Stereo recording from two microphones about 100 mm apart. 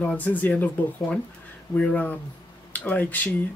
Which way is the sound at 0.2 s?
15° left (ahead or behind).